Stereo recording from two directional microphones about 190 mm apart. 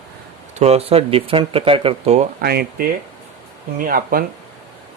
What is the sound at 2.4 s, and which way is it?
Speech, 55° right (ahead or behind).